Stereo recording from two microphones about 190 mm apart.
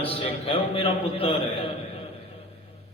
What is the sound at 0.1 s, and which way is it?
A man's voice, 30° left (ahead or behind).